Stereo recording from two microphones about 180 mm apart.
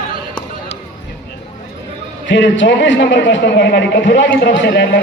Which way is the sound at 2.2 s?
90° left.